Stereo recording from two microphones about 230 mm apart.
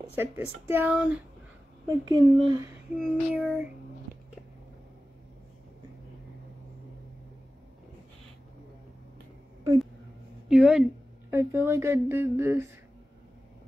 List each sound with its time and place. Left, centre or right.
0.1 s speech: centre
10.5 s speech: centre